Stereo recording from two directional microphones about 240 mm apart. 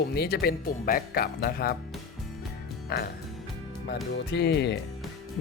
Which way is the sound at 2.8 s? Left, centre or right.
Left.